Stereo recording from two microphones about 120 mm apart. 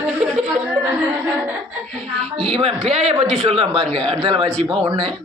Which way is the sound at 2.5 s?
60° right (ahead or behind).